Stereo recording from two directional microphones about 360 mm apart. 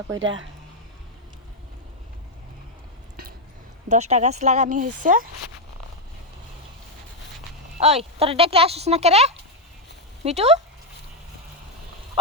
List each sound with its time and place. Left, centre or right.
0.2 s speech: right
3.8 s speech: centre
7.8 s speech: centre